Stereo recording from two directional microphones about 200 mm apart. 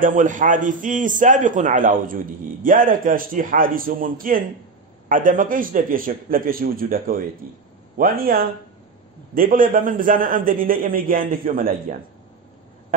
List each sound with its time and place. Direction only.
0.0 s a man's voice: 40° right (ahead or behind)